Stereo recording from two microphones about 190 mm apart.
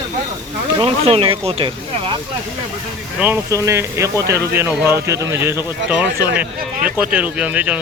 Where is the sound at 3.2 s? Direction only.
10° right (ahead or behind).